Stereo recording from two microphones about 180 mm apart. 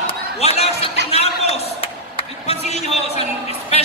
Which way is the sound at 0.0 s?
35° left (ahead or behind).